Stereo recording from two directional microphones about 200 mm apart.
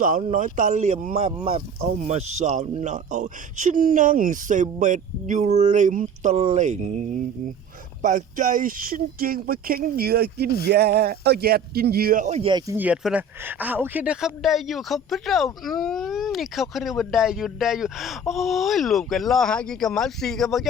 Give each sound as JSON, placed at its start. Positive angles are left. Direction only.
{"t": 0.0, "sound": "speech", "side_deg": -40}
{"t": 12.7, "sound": "speech", "side_deg": -5}